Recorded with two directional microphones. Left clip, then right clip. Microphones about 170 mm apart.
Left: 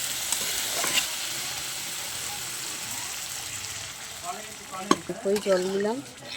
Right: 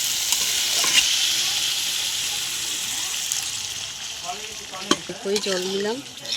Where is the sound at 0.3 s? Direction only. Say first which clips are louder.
Right 7 dB; 5° left (ahead or behind).